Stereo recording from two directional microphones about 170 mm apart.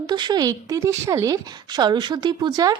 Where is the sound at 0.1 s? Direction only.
25° right (ahead or behind).